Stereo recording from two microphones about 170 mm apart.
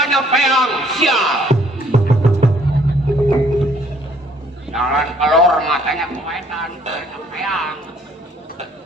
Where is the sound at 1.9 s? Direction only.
40° right (ahead or behind).